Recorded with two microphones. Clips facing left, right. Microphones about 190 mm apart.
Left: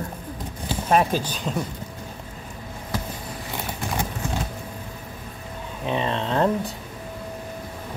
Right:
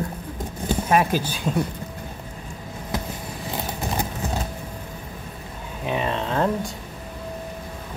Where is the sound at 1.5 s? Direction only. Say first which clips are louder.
Right 4 dB; 10° right (ahead or behind).